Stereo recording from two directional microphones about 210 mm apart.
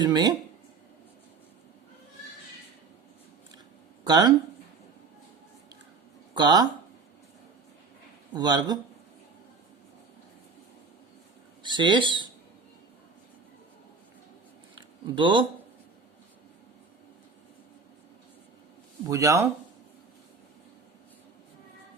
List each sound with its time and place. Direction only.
0.0 s speech: 20° right (ahead or behind)
4.0 s speech: 20° right (ahead or behind)
6.3 s speech: 20° right (ahead or behind)
8.3 s speech: 20° right (ahead or behind)
11.6 s speech: 20° right (ahead or behind)
14.8 s a sound: 20° right (ahead or behind)
19.0 s speech: 15° right (ahead or behind)